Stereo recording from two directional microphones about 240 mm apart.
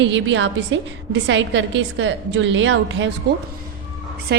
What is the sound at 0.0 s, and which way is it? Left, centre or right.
A woman's voice, right.